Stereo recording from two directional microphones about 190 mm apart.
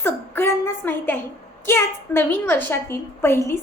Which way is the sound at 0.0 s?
15° left (ahead or behind).